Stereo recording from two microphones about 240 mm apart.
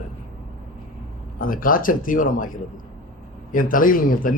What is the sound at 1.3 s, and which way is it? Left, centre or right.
Speech, left.